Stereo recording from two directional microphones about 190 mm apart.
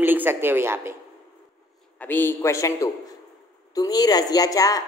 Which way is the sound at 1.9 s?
10° left (ahead or behind).